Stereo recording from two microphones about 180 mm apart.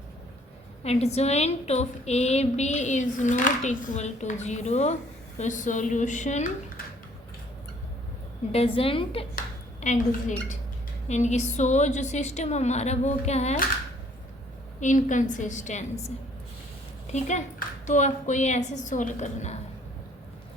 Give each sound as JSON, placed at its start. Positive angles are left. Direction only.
{"t": 0.9, "sound": "a woman's voice", "side_deg": 35}
{"t": 8.5, "sound": "a woman's voice", "side_deg": 30}
{"t": 9.8, "sound": "a woman's voice", "side_deg": 40}
{"t": 14.8, "sound": "a woman's voice", "side_deg": 45}